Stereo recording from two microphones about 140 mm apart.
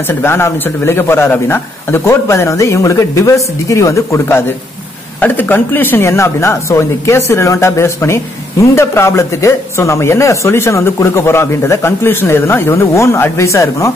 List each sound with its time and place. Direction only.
0.0 s speech: 15° left (ahead or behind)